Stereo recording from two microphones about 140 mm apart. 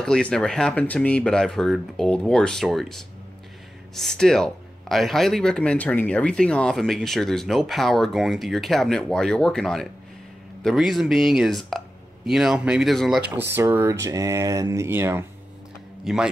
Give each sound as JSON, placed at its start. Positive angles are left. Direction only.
{"t": 0.0, "sound": "speech", "side_deg": 5}
{"t": 13.4, "sound": "speech", "side_deg": -15}
{"t": 16.0, "sound": "a man's voice", "side_deg": -5}